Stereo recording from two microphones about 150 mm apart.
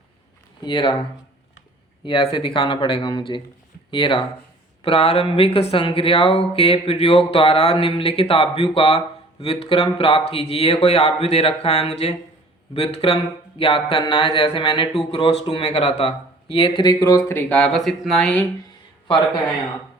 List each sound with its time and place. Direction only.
0.6 s speech: 30° left (ahead or behind)
2.0 s speech: 35° left (ahead or behind); by 18.4 s 5° left (ahead or behind)